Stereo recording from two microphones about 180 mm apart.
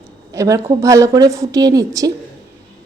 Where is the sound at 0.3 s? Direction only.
15° right (ahead or behind).